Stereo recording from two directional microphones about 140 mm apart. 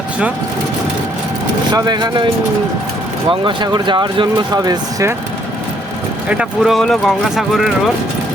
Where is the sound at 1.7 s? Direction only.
30° right (ahead or behind).